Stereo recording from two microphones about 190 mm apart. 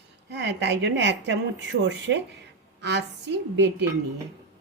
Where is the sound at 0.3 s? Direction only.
65° right (ahead or behind).